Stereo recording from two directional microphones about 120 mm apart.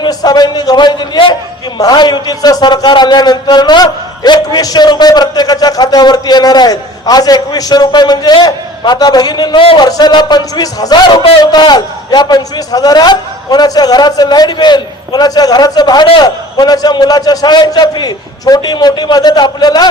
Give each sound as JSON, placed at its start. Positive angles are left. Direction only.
{"t": 0.0, "sound": "a man's voice", "side_deg": 35}